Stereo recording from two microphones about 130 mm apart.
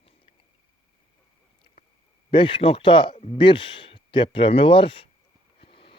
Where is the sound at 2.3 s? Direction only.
40° left (ahead or behind).